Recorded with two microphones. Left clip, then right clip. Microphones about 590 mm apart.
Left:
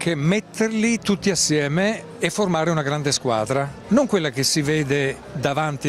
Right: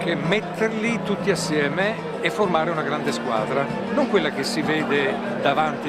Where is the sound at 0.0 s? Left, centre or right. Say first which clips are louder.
Right 1 dB; left.